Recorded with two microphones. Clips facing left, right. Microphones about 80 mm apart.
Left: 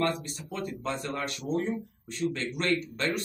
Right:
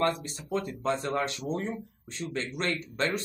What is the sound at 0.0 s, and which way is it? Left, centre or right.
Speech, right.